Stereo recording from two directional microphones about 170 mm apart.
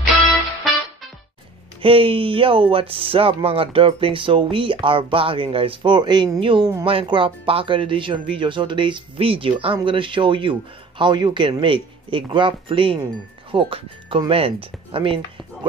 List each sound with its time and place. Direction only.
1.8 s speech: 30° right (ahead or behind)